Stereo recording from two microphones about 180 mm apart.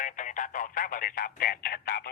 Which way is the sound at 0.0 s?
45° left (ahead or behind).